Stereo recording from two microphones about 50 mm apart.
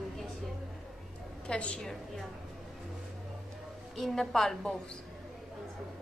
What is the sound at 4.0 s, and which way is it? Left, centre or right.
Speech, centre.